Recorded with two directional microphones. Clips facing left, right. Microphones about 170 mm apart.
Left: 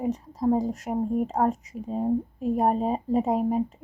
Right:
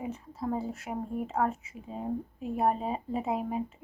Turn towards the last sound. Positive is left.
turn(degrees=40)  # may be behind; listen again after turning